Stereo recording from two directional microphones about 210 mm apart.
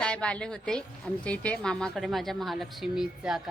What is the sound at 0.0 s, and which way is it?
A woman's voice, 5° left (ahead or behind).